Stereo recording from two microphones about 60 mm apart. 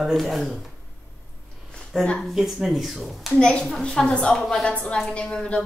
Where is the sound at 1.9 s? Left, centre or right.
Centre.